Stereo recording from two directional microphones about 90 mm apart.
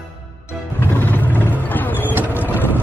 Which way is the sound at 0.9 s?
20° left (ahead or behind).